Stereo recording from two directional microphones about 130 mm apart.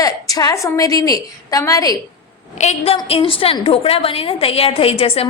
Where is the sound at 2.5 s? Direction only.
55° left (ahead or behind).